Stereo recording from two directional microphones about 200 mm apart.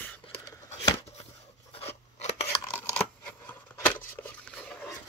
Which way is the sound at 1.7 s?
30° left (ahead or behind).